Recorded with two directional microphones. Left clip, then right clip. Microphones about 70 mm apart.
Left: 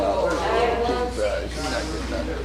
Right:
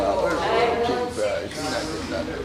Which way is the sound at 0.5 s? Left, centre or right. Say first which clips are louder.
Right 1 dB; centre.